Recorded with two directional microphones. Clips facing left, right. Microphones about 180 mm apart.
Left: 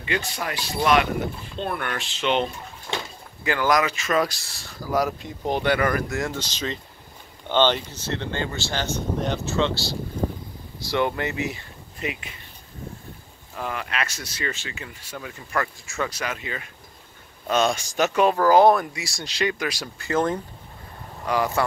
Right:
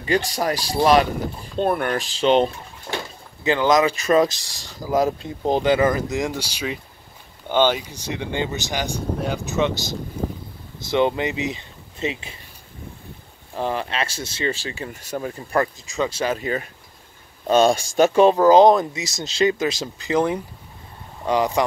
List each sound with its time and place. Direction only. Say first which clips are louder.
0.0 s speech: right 7 dB; 40° right (ahead or behind)
3.4 s speech: right 4 dB; 20° right (ahead or behind)
3.9 s speech: right 6 dB; 35° right (ahead or behind)
4.2 s speech: right 5 dB; 20° right (ahead or behind)
10.8 s speech: right 4 dB; 20° right (ahead or behind)
13.6 s speech: right 5 dB; 30° right (ahead or behind)
14.9 s speech: right 8 dB; 45° right (ahead or behind); by 21.6 s 20° right (ahead or behind)